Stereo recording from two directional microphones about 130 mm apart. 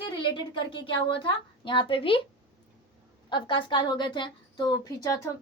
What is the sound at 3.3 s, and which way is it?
A woman's voice, 40° left (ahead or behind).